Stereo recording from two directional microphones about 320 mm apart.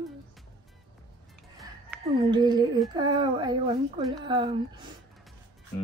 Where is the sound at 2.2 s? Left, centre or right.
Centre.